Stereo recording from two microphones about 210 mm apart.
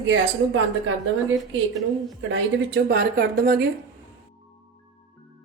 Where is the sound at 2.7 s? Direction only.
45° right (ahead or behind).